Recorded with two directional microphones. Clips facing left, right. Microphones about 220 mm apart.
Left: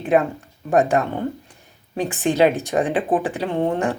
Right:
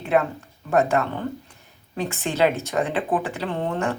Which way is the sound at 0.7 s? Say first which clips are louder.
Left 3 dB; 15° left (ahead or behind).